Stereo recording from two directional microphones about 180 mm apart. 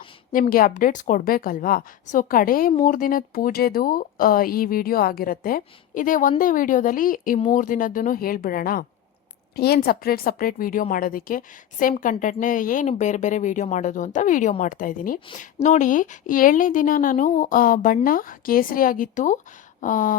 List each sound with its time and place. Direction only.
0.5 s a woman's voice: 50° left (ahead or behind)